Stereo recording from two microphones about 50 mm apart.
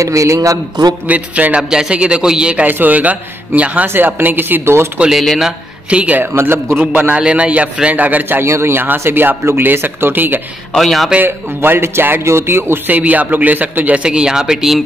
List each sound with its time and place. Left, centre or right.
0.0 s a man's voice: right
1.0 s a man's voice: right
1.6 s a man's voice: centre
2.5 s a man's voice: right
3.8 s speech: right
5.9 s a man's voice: right
6.3 s speech: right
6.8 s a man's voice: right
8.4 s speech: right
8.7 s speech: right
10.8 s a man's voice: centre
11.2 s speech: right
12.9 s a man's voice: right
14.0 s a man's voice: centre